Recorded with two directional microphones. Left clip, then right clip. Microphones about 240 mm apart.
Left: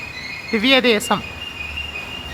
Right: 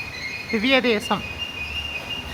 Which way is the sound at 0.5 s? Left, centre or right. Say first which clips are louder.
Left 4 dB; centre.